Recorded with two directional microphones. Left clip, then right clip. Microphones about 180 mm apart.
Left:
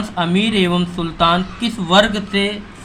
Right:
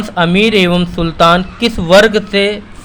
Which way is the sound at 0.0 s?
45° right (ahead or behind).